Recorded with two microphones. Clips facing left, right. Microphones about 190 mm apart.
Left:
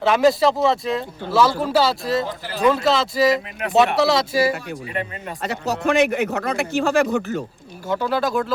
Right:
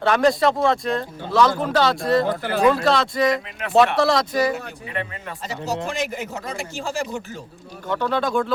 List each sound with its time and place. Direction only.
0.0 s speech: 5° left (ahead or behind)
2.2 s speech: 55° right (ahead or behind)
2.6 s speech: centre (ahead or behind)
5.4 s a man's voice: 65° left (ahead or behind)
7.9 s speech: 5° left (ahead or behind)